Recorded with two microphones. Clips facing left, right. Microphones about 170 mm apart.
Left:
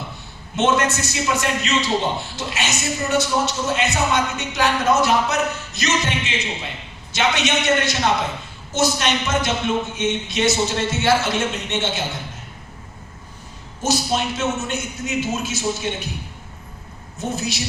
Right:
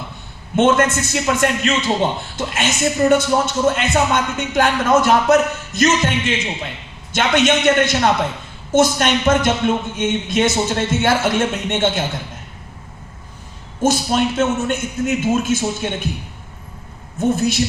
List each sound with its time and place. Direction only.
0.5 s a man's voice: 50° right (ahead or behind)
13.8 s a man's voice: 55° right (ahead or behind)
17.2 s a man's voice: 55° right (ahead or behind)